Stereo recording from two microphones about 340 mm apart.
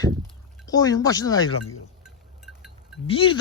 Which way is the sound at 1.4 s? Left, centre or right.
Left.